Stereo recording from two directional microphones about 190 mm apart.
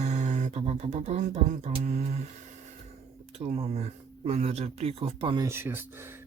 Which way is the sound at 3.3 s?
35° right (ahead or behind).